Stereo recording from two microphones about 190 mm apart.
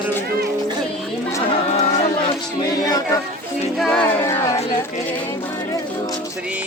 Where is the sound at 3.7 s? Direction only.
Centre (ahead or behind).